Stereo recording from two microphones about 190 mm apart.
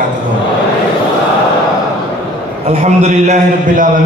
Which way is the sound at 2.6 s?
35° right (ahead or behind).